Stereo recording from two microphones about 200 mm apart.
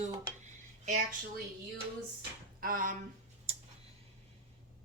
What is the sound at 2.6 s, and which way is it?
Speech, 45° right (ahead or behind).